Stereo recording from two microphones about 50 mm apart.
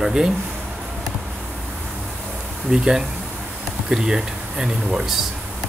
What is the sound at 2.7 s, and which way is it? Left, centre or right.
Speech, centre.